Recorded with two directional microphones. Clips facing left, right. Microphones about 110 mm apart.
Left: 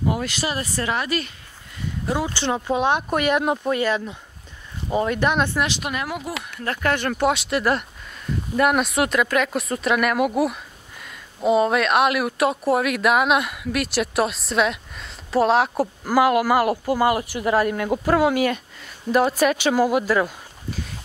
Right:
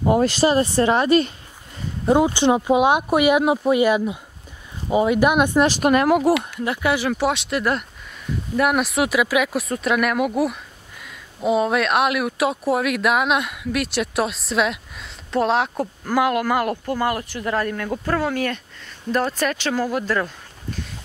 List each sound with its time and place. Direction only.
0.0 s speech: 35° right (ahead or behind)
2.0 s speech: 20° right (ahead or behind)
5.6 s speech: 45° right (ahead or behind)
6.6 s speech: 10° right (ahead or behind); by 20.9 s 5° left (ahead or behind)